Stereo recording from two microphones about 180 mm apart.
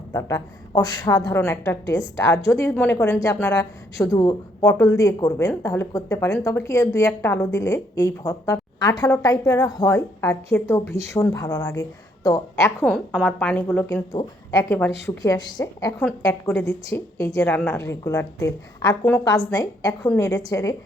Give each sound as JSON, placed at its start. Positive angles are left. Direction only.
{"t": 0.1, "sound": "a woman's voice", "side_deg": 20}
{"t": 12.8, "sound": "a woman's voice", "side_deg": 5}
{"t": 16.0, "sound": "a woman's voice", "side_deg": 10}